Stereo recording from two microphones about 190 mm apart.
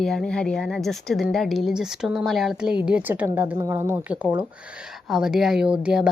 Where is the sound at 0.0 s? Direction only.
Centre (ahead or behind).